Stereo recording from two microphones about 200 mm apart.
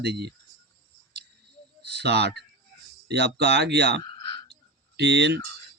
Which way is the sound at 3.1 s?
55° right (ahead or behind).